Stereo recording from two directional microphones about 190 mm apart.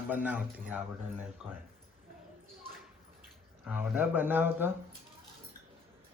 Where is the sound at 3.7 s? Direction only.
10° right (ahead or behind).